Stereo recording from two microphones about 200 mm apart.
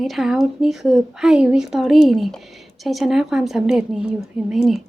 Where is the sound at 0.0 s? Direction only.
Centre (ahead or behind).